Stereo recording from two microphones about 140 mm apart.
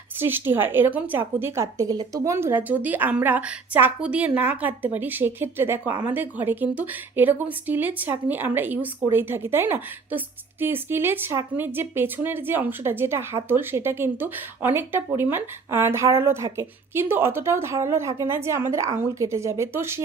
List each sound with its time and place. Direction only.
0.2 s a woman's voice: 15° right (ahead or behind)